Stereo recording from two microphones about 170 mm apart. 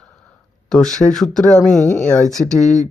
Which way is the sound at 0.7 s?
5° left (ahead or behind).